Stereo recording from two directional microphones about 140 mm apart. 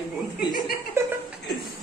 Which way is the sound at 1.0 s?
20° right (ahead or behind).